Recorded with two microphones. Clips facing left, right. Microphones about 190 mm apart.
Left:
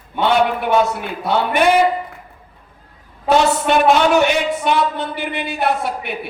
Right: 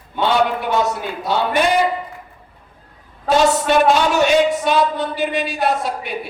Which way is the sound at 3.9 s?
60° left (ahead or behind).